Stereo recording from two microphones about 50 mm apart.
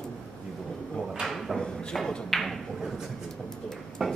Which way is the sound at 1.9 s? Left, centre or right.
Centre.